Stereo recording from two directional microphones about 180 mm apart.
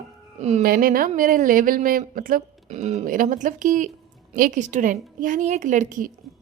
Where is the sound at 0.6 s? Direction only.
55° right (ahead or behind).